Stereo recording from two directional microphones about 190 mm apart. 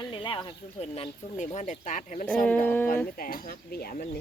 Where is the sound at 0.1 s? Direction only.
25° left (ahead or behind).